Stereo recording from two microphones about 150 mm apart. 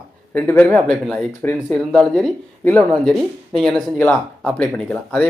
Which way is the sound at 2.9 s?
Centre (ahead or behind).